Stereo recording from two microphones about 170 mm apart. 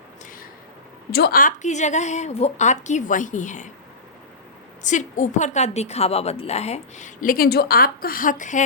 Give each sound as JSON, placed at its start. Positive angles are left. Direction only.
{"t": 1.1, "sound": "a woman's voice", "side_deg": 65}
{"t": 4.8, "sound": "a woman's voice", "side_deg": 45}